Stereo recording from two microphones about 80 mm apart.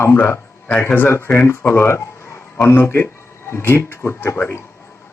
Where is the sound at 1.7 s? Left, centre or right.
Left.